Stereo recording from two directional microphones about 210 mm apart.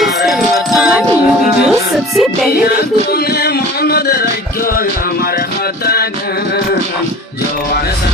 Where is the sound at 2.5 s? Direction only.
45° left (ahead or behind).